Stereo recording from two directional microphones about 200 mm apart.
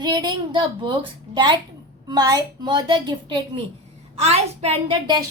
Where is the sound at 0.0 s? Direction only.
20° right (ahead or behind).